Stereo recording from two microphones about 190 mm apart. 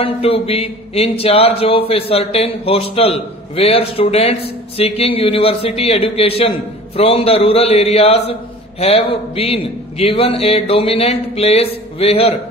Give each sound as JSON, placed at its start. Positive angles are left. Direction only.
{"t": 0.0, "sound": "speech", "side_deg": 30}